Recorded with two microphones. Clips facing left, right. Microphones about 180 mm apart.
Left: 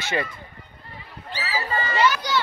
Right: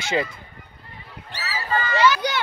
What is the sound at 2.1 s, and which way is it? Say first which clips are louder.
Children playing: even; 60° right (ahead or behind).